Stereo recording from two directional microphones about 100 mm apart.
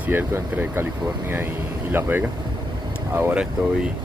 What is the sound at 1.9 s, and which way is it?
Speech, 20° right (ahead or behind).